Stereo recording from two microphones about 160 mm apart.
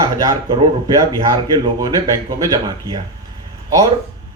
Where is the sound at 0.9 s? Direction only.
25° right (ahead or behind).